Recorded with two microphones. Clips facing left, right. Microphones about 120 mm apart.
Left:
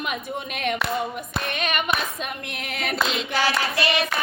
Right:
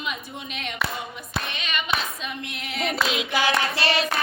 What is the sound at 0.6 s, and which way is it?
Clapping, 55° left (ahead or behind).